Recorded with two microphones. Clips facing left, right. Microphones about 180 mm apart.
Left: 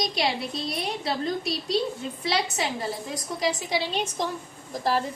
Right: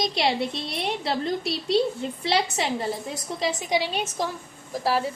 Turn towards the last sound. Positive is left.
turn(degrees=-5)  # may be behind; listen again after turning